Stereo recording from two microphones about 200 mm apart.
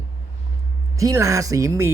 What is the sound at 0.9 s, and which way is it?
Speech, 15° right (ahead or behind).